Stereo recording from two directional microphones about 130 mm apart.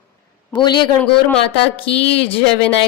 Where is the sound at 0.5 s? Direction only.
35° left (ahead or behind).